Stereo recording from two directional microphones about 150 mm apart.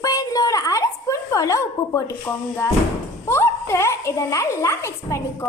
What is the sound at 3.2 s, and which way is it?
A woman's voice, 15° left (ahead or behind).